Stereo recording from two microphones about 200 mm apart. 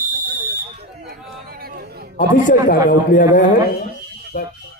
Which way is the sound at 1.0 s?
50° right (ahead or behind).